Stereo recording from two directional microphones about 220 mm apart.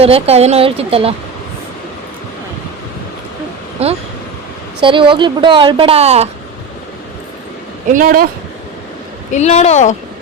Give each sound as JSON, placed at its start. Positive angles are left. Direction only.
{"t": 0.0, "sound": "a woman's voice", "side_deg": -25}
{"t": 3.8, "sound": "a woman's voice", "side_deg": -25}
{"t": 7.9, "sound": "speech", "side_deg": -40}
{"t": 9.3, "sound": "a woman's voice", "side_deg": 30}